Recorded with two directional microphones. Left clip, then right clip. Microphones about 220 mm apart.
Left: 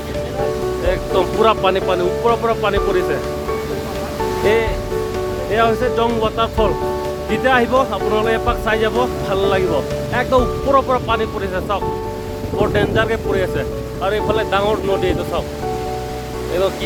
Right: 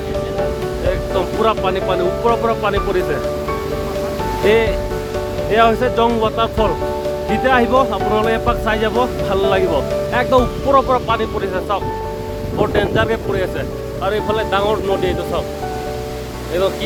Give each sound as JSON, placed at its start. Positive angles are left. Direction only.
{"t": 0.9, "sound": "speech", "side_deg": 25}
{"t": 1.9, "sound": "speech", "side_deg": 5}
{"t": 4.4, "sound": "speech", "side_deg": -20}